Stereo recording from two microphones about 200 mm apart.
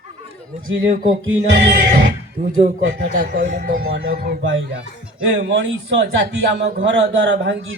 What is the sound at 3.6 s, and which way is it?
Groan, 45° right (ahead or behind).